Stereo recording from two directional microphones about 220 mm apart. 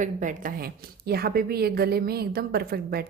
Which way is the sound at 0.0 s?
35° right (ahead or behind).